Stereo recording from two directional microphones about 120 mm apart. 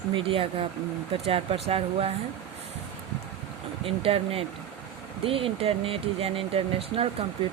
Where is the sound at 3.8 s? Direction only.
50° right (ahead or behind).